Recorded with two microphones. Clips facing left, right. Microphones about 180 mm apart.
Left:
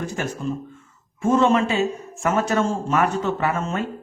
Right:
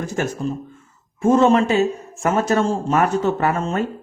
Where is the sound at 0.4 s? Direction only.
35° right (ahead or behind).